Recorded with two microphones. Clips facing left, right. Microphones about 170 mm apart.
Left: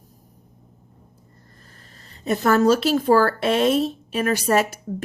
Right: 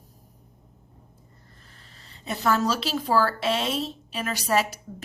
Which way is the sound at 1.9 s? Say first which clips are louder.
Left 10 dB; 45° left (ahead or behind).